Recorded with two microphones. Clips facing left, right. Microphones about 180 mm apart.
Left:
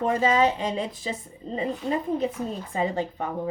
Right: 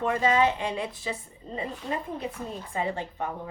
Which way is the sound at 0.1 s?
20° left (ahead or behind).